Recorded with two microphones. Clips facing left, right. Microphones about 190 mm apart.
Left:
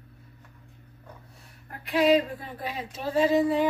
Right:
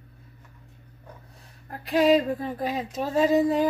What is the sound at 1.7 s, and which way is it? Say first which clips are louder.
Speech: right 2 dB; 40° right (ahead or behind).